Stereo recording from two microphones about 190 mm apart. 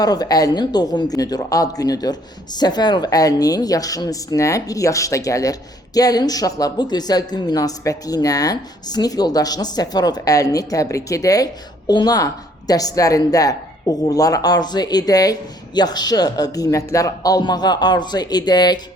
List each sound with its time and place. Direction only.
0.0 s speech: 20° left (ahead or behind)